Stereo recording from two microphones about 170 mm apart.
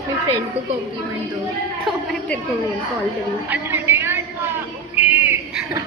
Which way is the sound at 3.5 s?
10° right (ahead or behind).